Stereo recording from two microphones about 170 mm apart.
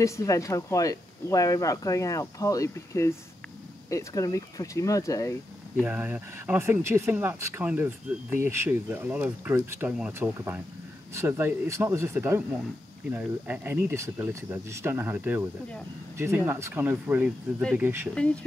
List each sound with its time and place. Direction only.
0.0 s speech: 20° left (ahead or behind)
5.8 s speech: 10° right (ahead or behind)
18.1 s speech: 5° left (ahead or behind)